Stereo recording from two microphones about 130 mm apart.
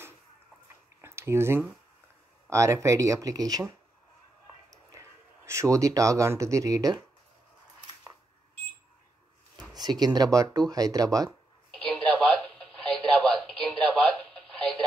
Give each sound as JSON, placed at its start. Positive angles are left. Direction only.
{"t": 1.0, "sound": "a sound", "side_deg": -20}
{"t": 2.5, "sound": "speech", "side_deg": -20}
{"t": 4.9, "sound": "speech", "side_deg": -20}
{"t": 9.8, "sound": "speech", "side_deg": -30}
{"t": 11.2, "sound": "telephone", "side_deg": 5}